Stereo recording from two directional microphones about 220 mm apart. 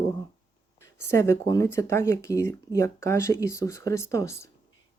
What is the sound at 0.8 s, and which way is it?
Speech, 10° left (ahead or behind).